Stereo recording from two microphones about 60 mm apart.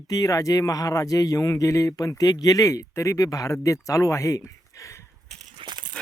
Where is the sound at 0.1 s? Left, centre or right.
Left.